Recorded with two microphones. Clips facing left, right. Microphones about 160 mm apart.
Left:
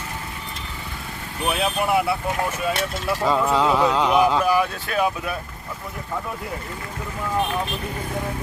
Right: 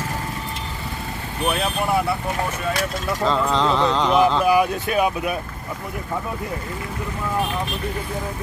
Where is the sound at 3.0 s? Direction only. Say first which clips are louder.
Left 1 dB; 10° left (ahead or behind).